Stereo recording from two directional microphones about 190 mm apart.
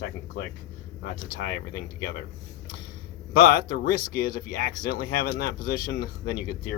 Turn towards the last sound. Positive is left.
turn(degrees=50)  # may be behind; listen again after turning